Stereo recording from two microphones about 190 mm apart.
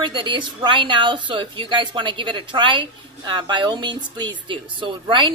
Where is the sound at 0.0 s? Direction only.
25° right (ahead or behind).